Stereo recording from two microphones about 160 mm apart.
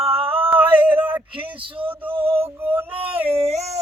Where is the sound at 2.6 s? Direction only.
10° right (ahead or behind).